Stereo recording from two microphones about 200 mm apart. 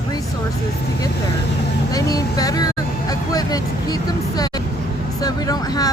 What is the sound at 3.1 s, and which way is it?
Vehicle, 20° left (ahead or behind).